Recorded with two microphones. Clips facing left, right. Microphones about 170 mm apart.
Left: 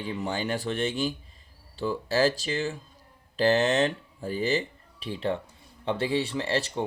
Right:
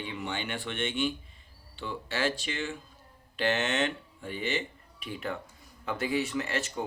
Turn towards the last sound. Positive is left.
turn(degrees=30)  # may be behind; listen again after turning